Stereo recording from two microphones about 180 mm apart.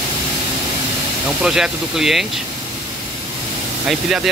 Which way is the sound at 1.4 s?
Centre (ahead or behind).